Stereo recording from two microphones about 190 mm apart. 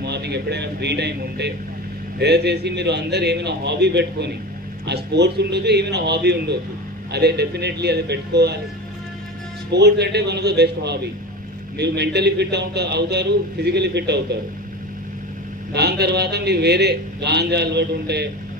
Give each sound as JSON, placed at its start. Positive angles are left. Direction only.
{"t": 0.0, "sound": "a man's voice", "side_deg": -60}
{"t": 9.7, "sound": "a man's voice", "side_deg": -60}
{"t": 15.7, "sound": "a man's voice", "side_deg": -60}